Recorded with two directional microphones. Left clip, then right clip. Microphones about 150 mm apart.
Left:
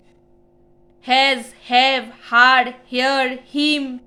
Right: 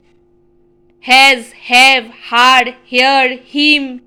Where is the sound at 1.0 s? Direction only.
20° right (ahead or behind).